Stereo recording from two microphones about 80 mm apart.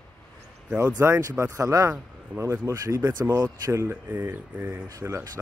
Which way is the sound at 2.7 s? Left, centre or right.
Right.